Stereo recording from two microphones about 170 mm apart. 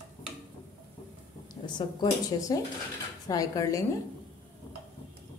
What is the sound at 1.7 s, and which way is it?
Speech, 25° left (ahead or behind).